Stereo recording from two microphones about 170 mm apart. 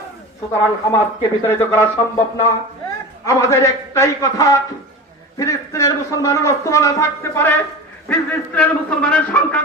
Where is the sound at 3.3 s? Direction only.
15° left (ahead or behind).